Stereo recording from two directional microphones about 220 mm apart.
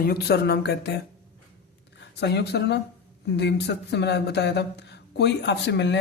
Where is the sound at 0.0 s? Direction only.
45° left (ahead or behind).